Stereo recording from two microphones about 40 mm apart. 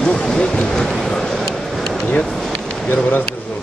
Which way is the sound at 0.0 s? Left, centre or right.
Left.